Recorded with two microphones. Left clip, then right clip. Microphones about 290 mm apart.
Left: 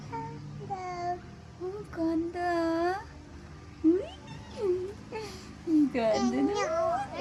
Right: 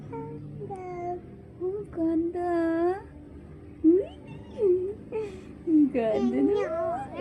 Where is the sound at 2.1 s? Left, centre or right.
Left.